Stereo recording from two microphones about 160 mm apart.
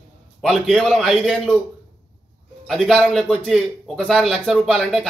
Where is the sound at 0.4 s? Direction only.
Centre (ahead or behind).